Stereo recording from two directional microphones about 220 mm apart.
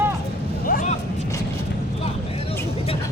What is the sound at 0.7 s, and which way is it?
Vehicle, 40° left (ahead or behind).